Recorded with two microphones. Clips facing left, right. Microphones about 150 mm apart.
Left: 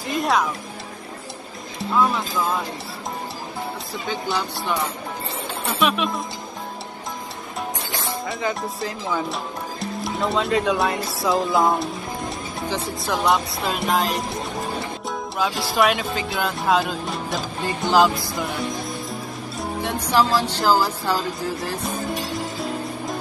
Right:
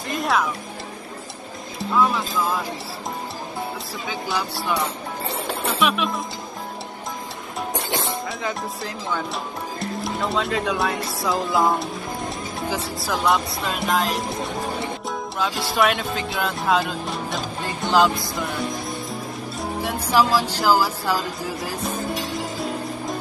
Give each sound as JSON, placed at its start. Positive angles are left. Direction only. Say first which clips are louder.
{"t": 0.1, "sound": "music", "louder": "left 1 dB", "side_deg": 0}
{"t": 1.8, "sound": "speech", "louder": "even", "side_deg": 0}
{"t": 4.1, "sound": "speech", "louder": "left 1 dB", "side_deg": 0}
{"t": 8.3, "sound": "speech", "louder": "left 2 dB", "side_deg": 0}
{"t": 15.0, "sound": "music", "louder": "left 3 dB", "side_deg": 0}
{"t": 19.6, "sound": "speech", "louder": "left 1 dB", "side_deg": -5}